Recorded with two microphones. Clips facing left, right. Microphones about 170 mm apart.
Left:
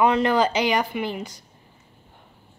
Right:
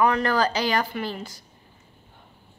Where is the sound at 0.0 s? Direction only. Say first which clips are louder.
Left 2 dB; 20° left (ahead or behind).